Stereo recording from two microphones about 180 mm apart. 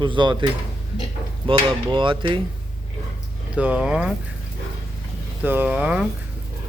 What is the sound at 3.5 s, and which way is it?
Speech, 5° right (ahead or behind).